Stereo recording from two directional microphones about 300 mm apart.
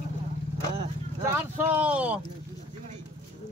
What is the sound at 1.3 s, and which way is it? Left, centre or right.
Speech, centre.